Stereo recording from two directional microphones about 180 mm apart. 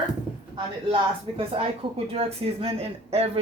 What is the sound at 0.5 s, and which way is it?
Speech, 30° right (ahead or behind).